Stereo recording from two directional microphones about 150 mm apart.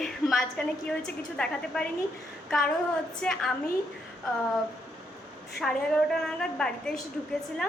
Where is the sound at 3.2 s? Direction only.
5° left (ahead or behind).